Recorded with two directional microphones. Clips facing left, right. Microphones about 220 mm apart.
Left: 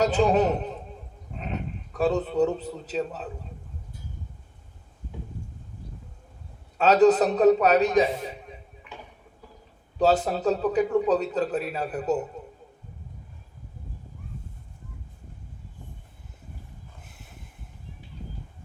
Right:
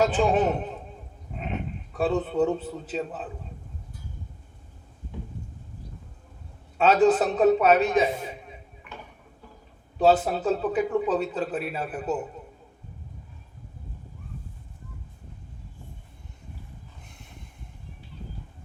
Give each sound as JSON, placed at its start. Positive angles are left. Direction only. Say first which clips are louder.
{"t": 0.0, "sound": "a man's voice", "louder": "left 1 dB", "side_deg": 40}
{"t": 6.8, "sound": "a man's voice", "louder": "left 2 dB", "side_deg": 40}
{"t": 10.0, "sound": "a man's voice", "louder": "right 1 dB", "side_deg": 40}
{"t": 17.0, "sound": "vehicle", "louder": "right 1 dB", "side_deg": 5}